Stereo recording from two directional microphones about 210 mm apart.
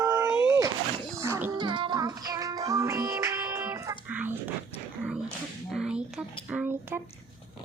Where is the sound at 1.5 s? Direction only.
20° right (ahead or behind).